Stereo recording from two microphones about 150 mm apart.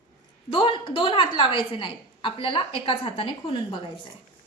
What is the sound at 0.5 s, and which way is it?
A woman's voice, 35° left (ahead or behind).